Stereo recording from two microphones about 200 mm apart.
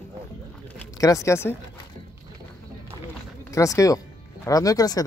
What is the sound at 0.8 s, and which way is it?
Speech, 15° left (ahead or behind).